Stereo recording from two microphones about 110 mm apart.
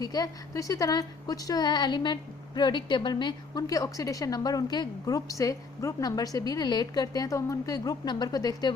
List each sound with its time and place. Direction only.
0.0 s a woman's voice: 35° left (ahead or behind)